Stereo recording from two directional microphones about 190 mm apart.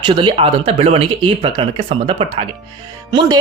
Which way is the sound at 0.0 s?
25° right (ahead or behind).